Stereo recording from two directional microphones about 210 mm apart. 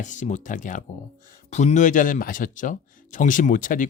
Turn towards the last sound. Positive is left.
turn(degrees=40)  # may be behind; listen again after turning